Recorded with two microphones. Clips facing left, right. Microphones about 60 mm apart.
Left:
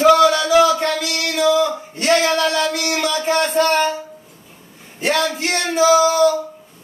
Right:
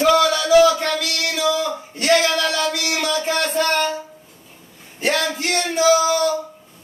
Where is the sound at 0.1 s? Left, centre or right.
Left.